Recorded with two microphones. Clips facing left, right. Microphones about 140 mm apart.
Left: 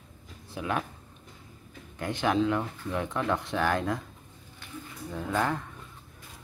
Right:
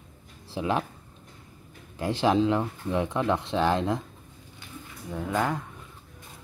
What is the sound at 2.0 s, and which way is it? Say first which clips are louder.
Speech: right 3 dB; 30° right (ahead or behind).